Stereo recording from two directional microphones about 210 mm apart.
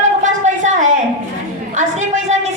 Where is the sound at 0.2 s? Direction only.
35° right (ahead or behind).